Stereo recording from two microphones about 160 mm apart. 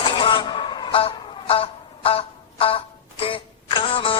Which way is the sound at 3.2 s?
35° left (ahead or behind).